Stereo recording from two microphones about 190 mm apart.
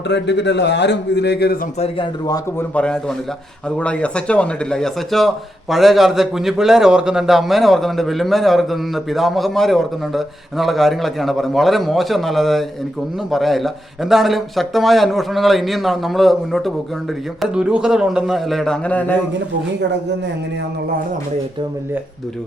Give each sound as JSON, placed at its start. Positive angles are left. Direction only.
{"t": 0.1, "sound": "a man's voice", "side_deg": 65}
{"t": 1.8, "sound": "a man's voice", "side_deg": 25}
{"t": 2.7, "sound": "speech", "side_deg": 5}